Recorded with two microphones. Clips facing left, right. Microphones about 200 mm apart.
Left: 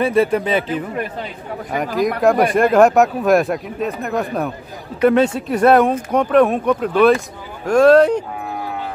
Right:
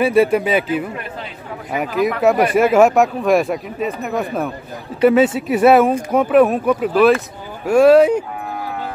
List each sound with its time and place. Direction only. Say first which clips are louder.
0.0 s speech: right 2 dB; 10° right (ahead or behind)
1.9 s speech: right 1 dB; 40° left (ahead or behind)
2.2 s speech: even; 5° right (ahead or behind)